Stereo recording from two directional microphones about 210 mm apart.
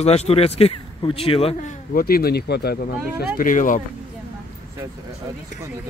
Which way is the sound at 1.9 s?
45° left (ahead or behind).